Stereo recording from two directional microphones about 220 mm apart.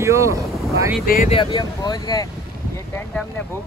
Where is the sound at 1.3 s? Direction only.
20° left (ahead or behind).